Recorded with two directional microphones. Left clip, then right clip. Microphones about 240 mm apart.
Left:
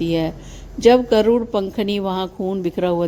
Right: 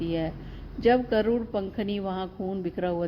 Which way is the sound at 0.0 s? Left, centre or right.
Left.